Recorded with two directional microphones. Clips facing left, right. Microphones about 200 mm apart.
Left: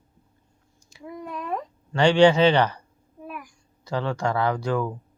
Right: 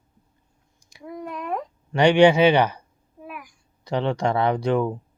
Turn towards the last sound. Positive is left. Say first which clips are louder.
# right 3 dB
turn(degrees=-20)  # may be behind; listen again after turning